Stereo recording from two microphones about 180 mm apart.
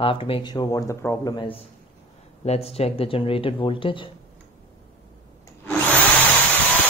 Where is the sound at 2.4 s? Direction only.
35° left (ahead or behind).